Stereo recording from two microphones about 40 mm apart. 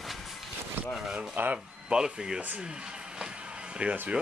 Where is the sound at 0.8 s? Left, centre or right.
Right.